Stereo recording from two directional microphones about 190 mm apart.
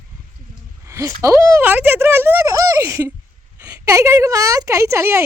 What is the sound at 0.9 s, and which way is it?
A woman's voice, 15° right (ahead or behind).